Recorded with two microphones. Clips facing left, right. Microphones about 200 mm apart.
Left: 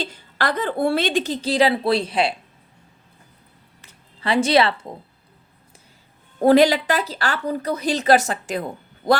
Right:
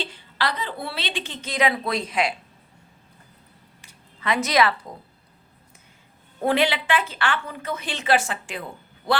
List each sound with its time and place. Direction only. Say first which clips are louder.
0.0 s a woman's voice: left 3 dB; 45° left (ahead or behind)
4.2 s a woman's voice: left 4 dB; 30° left (ahead or behind)
6.4 s a woman's voice: left 8 dB; 40° left (ahead or behind)